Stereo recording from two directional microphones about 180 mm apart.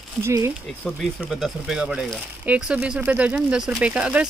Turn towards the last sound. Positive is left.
turn(degrees=-5)  # may be behind; listen again after turning